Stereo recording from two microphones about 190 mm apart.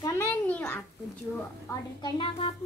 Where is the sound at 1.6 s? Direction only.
25° left (ahead or behind).